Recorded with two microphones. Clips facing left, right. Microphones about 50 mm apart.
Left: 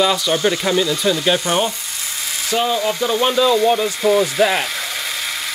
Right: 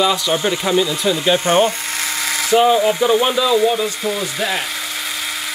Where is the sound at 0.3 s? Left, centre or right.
Centre.